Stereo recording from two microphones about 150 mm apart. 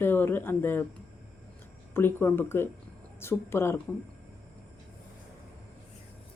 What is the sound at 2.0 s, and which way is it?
Speech, 15° left (ahead or behind).